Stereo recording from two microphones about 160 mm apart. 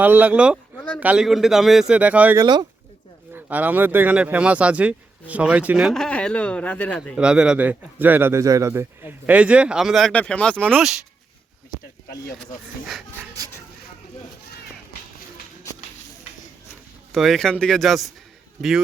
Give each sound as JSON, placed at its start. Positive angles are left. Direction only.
{"t": 0.0, "sound": "a man's voice", "side_deg": -10}
{"t": 2.3, "sound": "speech", "side_deg": -25}
{"t": 3.3, "sound": "speech", "side_deg": -10}
{"t": 7.2, "sound": "a man's voice", "side_deg": -5}
{"t": 12.4, "sound": "a man's voice", "side_deg": 0}
{"t": 17.1, "sound": "a man's voice", "side_deg": 0}